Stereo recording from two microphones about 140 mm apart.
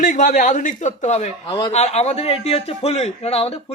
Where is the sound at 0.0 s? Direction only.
70° left (ahead or behind); by 1.3 s 55° left (ahead or behind).